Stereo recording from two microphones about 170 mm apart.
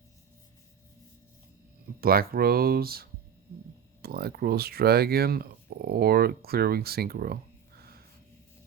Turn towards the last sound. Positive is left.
turn(degrees=-65)  # may be behind; listen again after turning